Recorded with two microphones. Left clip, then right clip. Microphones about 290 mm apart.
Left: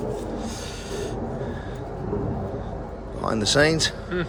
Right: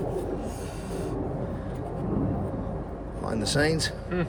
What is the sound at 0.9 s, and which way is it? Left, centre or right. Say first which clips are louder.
Rub: left 3 dB; left.